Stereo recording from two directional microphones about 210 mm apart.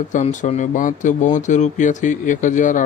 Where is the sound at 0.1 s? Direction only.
35° left (ahead or behind).